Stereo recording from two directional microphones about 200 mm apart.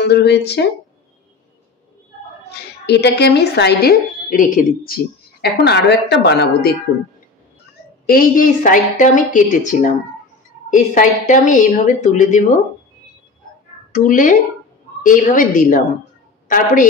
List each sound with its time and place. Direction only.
0.0 s speech: 55° left (ahead or behind)
2.5 s speech: 55° left (ahead or behind)
5.4 s speech: 55° left (ahead or behind)
8.1 s a woman's voice: 45° left (ahead or behind)
13.9 s a woman's voice: 40° left (ahead or behind)